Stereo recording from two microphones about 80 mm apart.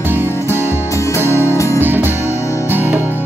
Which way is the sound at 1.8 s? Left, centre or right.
Right.